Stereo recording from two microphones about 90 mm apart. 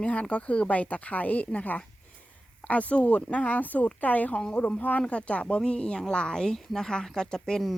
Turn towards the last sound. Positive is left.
turn(degrees=0)  # may be behind; listen again after turning